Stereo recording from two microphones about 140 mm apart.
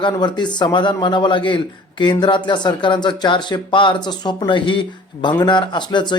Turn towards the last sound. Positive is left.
turn(degrees=35)  # may be behind; listen again after turning